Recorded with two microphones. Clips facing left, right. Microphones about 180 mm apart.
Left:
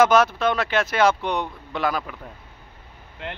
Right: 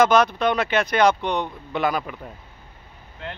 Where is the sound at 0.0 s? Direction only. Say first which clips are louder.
Even; 5° left (ahead or behind).